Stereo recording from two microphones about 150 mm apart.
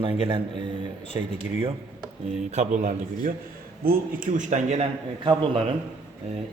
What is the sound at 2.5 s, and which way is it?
Speech, 50° right (ahead or behind).